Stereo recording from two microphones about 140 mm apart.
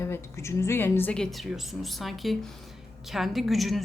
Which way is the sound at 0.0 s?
20° left (ahead or behind).